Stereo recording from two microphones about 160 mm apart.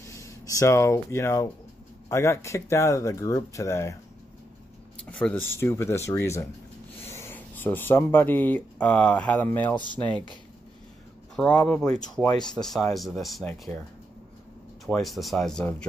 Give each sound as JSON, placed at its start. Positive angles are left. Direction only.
{"t": 0.0, "sound": "speech", "side_deg": 20}
{"t": 5.0, "sound": "speech", "side_deg": 10}
{"t": 9.8, "sound": "speech", "side_deg": 30}
{"t": 11.3, "sound": "speech", "side_deg": 10}
{"t": 14.9, "sound": "speech", "side_deg": 0}